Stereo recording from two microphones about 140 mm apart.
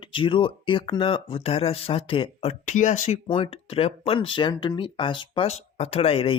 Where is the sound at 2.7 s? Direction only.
60° left (ahead or behind).